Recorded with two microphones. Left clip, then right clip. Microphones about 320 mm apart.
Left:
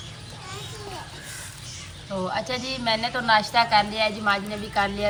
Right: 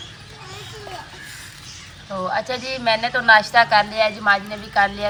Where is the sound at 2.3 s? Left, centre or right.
Centre.